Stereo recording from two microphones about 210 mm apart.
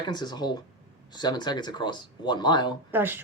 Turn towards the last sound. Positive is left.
turn(degrees=-10)  # may be behind; listen again after turning